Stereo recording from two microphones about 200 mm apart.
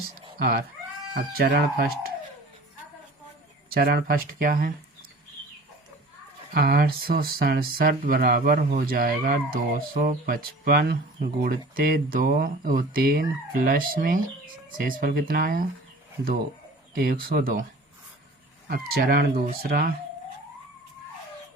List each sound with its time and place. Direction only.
0.3 s speech: 50° right (ahead or behind)
3.7 s speech: 50° right (ahead or behind)
6.5 s speech: 50° right (ahead or behind)
16.9 s speech: 45° right (ahead or behind)
18.7 s speech: 50° right (ahead or behind)